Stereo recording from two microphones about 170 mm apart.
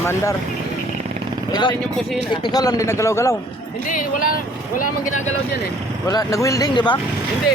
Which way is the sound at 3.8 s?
55° left (ahead or behind).